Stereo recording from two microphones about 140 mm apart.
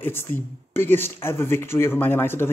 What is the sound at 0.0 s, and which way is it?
Speech, 15° left (ahead or behind).